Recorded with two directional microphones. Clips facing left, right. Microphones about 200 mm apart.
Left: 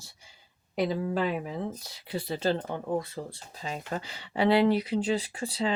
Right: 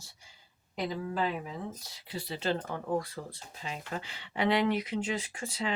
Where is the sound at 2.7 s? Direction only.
20° left (ahead or behind).